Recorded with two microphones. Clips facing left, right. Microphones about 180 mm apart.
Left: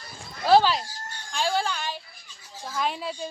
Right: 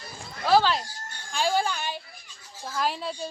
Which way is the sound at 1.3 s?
10° right (ahead or behind).